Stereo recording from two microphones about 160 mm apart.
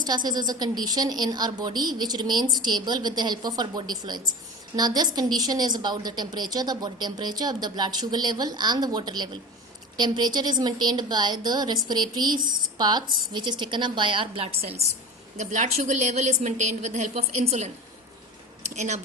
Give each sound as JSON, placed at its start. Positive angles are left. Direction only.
{"t": 0.0, "sound": "a woman's voice", "side_deg": -25}
{"t": 12.4, "sound": "a woman's voice", "side_deg": -60}
{"t": 12.7, "sound": "a woman's voice", "side_deg": -25}
{"t": 18.7, "sound": "a woman's voice", "side_deg": -45}